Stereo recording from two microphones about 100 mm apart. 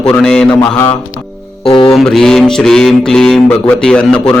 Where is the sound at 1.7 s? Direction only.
55° left (ahead or behind).